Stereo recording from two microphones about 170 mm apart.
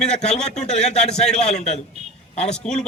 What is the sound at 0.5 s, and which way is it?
A man's voice, 40° left (ahead or behind).